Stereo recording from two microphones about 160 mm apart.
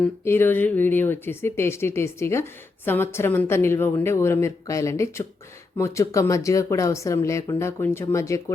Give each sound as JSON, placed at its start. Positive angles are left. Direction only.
{"t": 0.0, "sound": "speech", "side_deg": 15}